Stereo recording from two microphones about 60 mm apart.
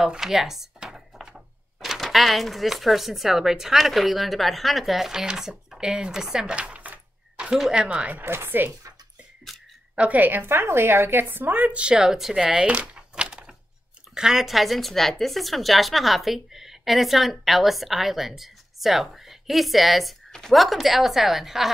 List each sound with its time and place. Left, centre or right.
0.0 s speech: centre
5.7 s a sound: centre
7.7 s speech: right
8.2 s speech: right
9.9 s speech: right; by 12.6 s centre
12.6 s a sound: centre
14.1 s speech: centre